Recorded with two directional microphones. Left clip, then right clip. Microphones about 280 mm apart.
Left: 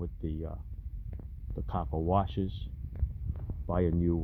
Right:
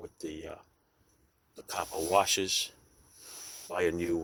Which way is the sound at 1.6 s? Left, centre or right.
Centre.